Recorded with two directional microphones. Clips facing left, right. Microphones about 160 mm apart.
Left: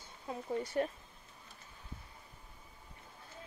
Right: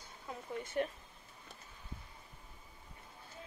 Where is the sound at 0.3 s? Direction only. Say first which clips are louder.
Left 5 dB; 35° left (ahead or behind).